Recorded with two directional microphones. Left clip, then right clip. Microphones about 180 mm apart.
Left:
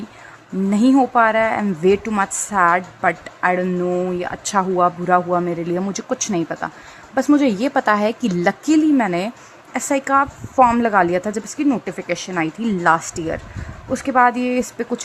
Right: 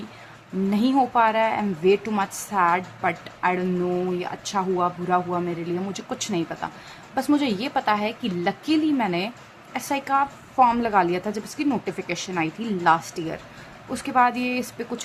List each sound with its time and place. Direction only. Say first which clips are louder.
0.7 s a woman's voice: left 6 dB; 30° left (ahead or behind)